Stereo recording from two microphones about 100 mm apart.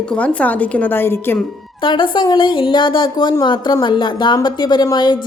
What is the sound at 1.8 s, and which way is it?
A woman's voice, 55° left (ahead or behind).